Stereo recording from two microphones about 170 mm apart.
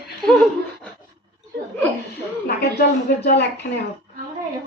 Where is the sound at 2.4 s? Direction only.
70° left (ahead or behind).